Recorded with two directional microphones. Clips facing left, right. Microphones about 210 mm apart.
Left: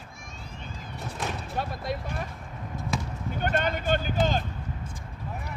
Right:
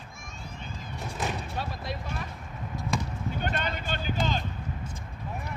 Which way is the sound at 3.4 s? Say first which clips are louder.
Left 6 dB; 45° left (ahead or behind).